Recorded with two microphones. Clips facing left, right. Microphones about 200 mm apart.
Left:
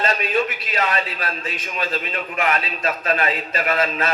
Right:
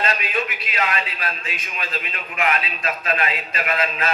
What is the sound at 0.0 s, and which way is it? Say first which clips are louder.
A man's voice: left 4 dB; 40° left (ahead or behind).